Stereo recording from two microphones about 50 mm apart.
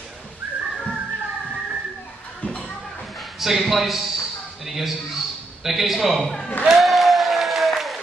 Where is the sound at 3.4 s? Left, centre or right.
Centre.